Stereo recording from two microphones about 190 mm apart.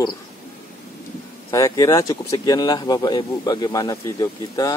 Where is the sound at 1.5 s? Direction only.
15° left (ahead or behind).